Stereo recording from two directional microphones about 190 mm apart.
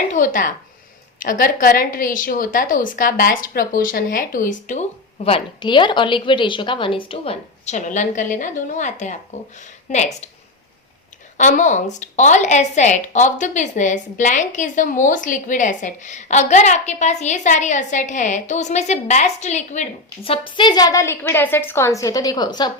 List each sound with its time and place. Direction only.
0.1 s a woman's voice: 45° left (ahead or behind)
11.3 s a woman's voice: 40° left (ahead or behind); by 22.7 s 20° left (ahead or behind)